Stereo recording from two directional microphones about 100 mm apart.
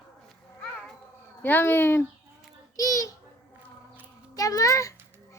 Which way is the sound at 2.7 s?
35° left (ahead or behind).